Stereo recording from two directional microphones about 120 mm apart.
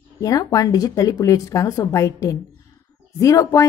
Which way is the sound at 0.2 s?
30° left (ahead or behind).